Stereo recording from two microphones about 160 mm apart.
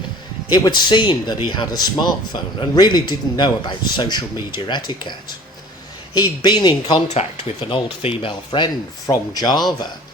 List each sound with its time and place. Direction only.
0.5 s speech: 25° left (ahead or behind)
6.1 s speech: 25° left (ahead or behind)